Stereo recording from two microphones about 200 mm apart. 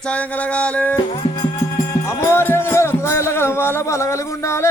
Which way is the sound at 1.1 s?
25° left (ahead or behind).